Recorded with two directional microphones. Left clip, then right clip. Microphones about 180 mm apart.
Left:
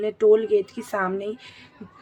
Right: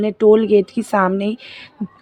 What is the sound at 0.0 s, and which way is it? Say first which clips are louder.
Speech: right 5 dB; 40° right (ahead or behind).